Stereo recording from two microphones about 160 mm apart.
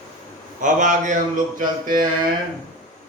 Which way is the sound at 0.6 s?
50° right (ahead or behind).